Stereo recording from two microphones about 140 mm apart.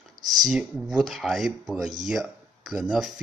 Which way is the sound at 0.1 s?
30° right (ahead or behind).